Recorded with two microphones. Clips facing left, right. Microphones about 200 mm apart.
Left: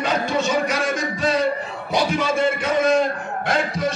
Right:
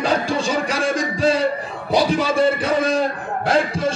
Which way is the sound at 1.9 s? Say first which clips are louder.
Right 3 dB; 35° right (ahead or behind).